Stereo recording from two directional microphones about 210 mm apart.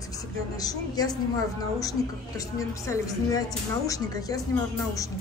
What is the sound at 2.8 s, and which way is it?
Speech, 15° left (ahead or behind).